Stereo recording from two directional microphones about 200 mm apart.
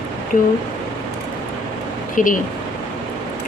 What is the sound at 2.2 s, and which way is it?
Speech, 40° left (ahead or behind).